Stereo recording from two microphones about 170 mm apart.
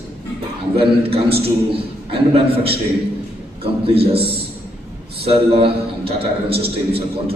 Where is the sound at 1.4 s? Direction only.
35° right (ahead or behind).